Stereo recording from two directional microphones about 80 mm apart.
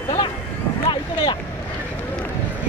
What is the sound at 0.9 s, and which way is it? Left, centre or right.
Boat, left.